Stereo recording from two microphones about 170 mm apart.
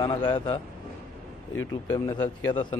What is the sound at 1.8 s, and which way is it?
Speech, 25° left (ahead or behind).